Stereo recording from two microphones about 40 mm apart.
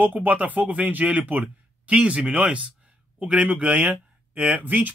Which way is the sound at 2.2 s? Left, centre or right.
Centre.